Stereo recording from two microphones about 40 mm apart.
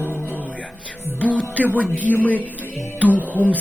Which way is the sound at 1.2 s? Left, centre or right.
Left.